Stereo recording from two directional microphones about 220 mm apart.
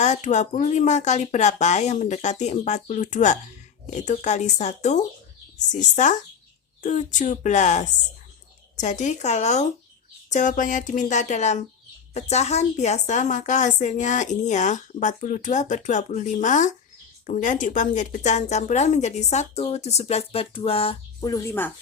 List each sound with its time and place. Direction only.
0.0 s a woman's voice: 30° left (ahead or behind); by 21.7 s 10° left (ahead or behind)